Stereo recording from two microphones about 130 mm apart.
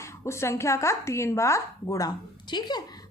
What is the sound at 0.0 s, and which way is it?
Speech, 20° left (ahead or behind).